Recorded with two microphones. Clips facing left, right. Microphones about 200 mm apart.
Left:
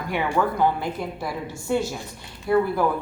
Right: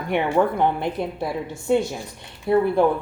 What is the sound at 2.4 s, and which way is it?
Speech, 25° right (ahead or behind).